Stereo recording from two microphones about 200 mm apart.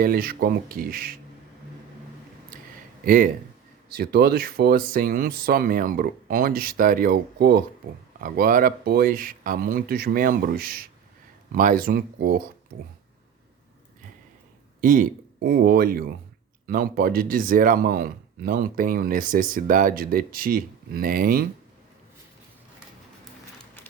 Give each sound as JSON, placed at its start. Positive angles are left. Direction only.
{"t": 0.0, "sound": "speech", "side_deg": -45}
{"t": 3.0, "sound": "speech", "side_deg": -45}
{"t": 14.8, "sound": "speech", "side_deg": -40}